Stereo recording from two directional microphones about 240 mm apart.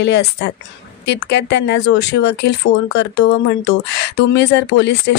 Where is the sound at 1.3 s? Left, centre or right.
Left.